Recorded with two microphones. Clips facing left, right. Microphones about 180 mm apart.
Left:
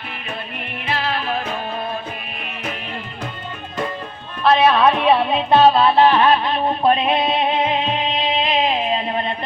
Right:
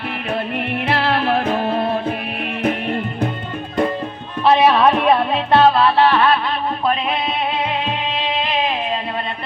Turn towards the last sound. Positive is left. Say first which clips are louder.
# left 3 dB
turn(degrees=25)  # may be behind; listen again after turning